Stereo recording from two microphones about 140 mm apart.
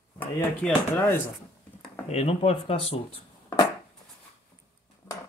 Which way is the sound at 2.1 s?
45° left (ahead or behind).